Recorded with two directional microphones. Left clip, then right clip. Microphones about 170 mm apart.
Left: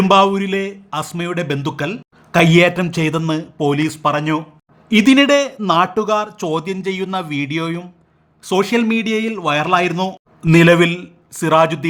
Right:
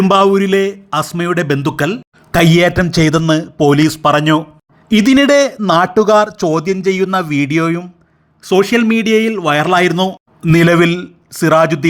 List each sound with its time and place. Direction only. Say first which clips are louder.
0.1 s speech: right 3 dB; 25° right (ahead or behind)
6.3 s speech: right 6 dB; 20° right (ahead or behind)
8.4 s speech: right 5 dB; 15° right (ahead or behind)